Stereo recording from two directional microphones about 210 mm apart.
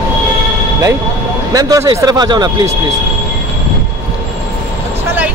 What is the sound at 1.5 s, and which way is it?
Speech, 15° right (ahead or behind).